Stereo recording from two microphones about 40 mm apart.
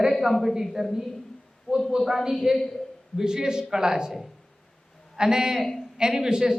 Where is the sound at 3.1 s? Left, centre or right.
Centre.